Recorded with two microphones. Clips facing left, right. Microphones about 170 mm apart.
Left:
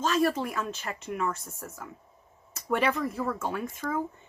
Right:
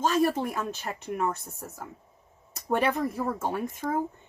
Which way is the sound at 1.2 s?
20° right (ahead or behind).